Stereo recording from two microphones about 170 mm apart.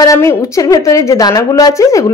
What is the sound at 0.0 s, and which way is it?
A woman's voice, 20° left (ahead or behind).